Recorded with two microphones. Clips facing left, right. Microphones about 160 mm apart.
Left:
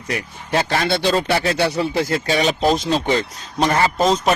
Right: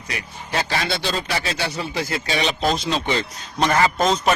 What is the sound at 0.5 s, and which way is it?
Speech, 55° left (ahead or behind).